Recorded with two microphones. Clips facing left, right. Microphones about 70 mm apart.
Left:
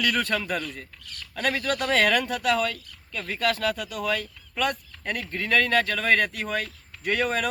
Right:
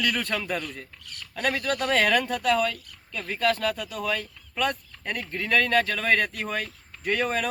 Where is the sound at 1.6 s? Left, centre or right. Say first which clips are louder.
Left 1 dB; left.